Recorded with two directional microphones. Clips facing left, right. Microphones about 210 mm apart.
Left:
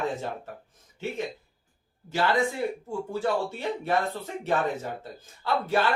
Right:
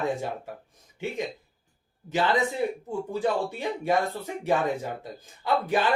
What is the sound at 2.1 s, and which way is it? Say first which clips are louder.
A man's voice: right 1 dB; 20° right (ahead or behind).